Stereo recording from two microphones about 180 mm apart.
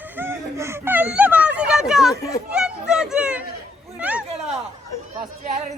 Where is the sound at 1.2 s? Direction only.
10° right (ahead or behind).